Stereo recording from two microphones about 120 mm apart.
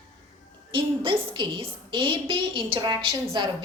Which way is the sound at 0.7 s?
45° right (ahead or behind).